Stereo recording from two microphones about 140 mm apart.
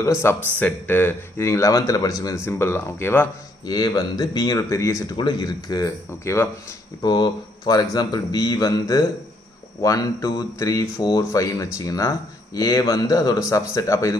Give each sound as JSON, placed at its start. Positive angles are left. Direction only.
{"t": 0.0, "sound": "speech", "side_deg": 20}
{"t": 3.6, "sound": "speech", "side_deg": 30}
{"t": 5.1, "sound": "speech", "side_deg": 30}
{"t": 7.0, "sound": "speech", "side_deg": 30}